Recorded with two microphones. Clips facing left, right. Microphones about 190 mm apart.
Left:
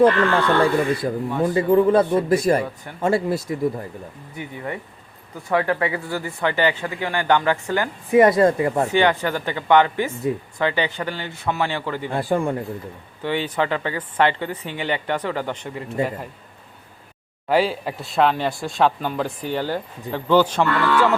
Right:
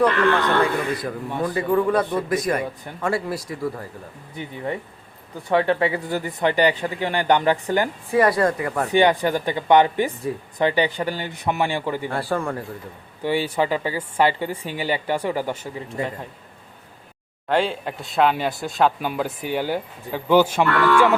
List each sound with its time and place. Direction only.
0.0 s speech: 30° left (ahead or behind)
4.4 s speech: 25° right (ahead or behind)
8.1 s speech: 20° left (ahead or behind)
8.9 s speech: 15° right (ahead or behind)
12.0 s speech: 20° left (ahead or behind)
13.2 s speech: 10° right (ahead or behind)
17.5 s speech: 5° left (ahead or behind); by 21.2 s 15° right (ahead or behind)